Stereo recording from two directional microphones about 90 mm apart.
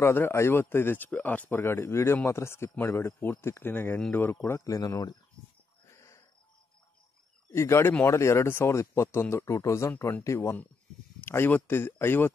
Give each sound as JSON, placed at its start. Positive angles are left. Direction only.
{"t": 0.0, "sound": "speech", "side_deg": 30}
{"t": 5.9, "sound": "cricket", "side_deg": 35}
{"t": 7.5, "sound": "speech", "side_deg": 30}